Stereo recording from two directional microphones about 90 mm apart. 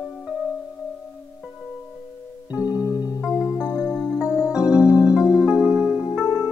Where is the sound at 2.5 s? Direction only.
15° right (ahead or behind).